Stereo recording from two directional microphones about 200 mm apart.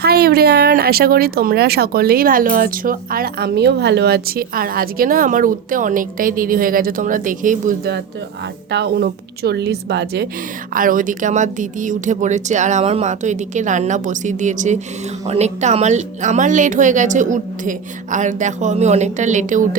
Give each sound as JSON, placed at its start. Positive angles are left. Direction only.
{"t": 0.0, "sound": "speech", "side_deg": -50}
{"t": 8.7, "sound": "a woman's voice", "side_deg": -60}
{"t": 10.8, "sound": "speech", "side_deg": -45}